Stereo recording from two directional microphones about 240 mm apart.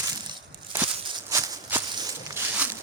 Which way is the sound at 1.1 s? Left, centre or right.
Centre.